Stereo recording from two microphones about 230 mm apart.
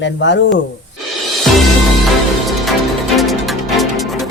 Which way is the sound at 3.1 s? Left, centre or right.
Centre.